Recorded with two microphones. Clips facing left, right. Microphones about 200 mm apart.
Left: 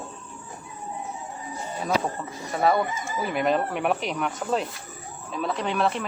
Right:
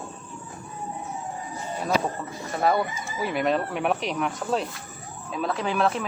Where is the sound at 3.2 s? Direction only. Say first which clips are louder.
Even; centre (ahead or behind).